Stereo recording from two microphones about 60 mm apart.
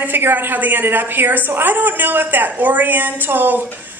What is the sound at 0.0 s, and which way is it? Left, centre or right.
A woman's voice, right.